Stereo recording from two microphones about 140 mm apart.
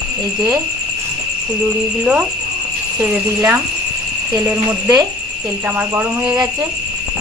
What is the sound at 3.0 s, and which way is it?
Speech, 10° right (ahead or behind).